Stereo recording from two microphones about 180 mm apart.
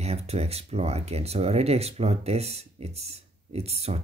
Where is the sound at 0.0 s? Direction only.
35° right (ahead or behind).